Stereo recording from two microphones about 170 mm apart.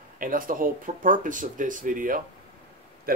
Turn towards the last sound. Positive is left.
turn(degrees=-60)  # may be behind; listen again after turning